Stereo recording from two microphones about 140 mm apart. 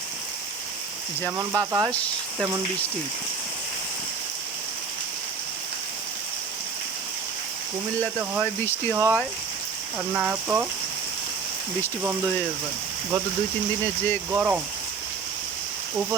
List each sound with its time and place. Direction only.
1.2 s speech: 20° right (ahead or behind)
8.0 s speech: 15° right (ahead or behind)
14.3 s speech: 15° right (ahead or behind)